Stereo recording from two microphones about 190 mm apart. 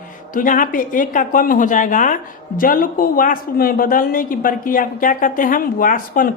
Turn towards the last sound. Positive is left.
turn(degrees=45)  # may be behind; listen again after turning